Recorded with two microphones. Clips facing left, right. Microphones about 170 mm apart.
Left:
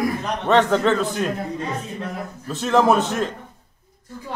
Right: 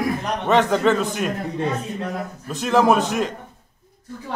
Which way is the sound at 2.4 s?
10° right (ahead or behind).